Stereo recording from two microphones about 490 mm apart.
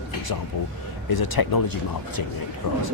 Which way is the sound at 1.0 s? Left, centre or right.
Left.